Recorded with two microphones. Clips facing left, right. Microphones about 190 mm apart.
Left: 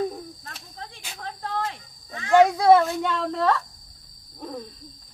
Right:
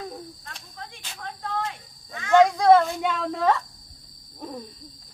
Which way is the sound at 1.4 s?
35° left (ahead or behind).